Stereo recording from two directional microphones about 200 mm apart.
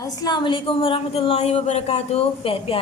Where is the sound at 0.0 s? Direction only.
20° left (ahead or behind).